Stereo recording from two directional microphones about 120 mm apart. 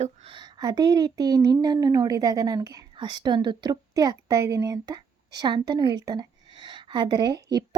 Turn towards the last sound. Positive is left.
turn(degrees=-35)  # may be behind; listen again after turning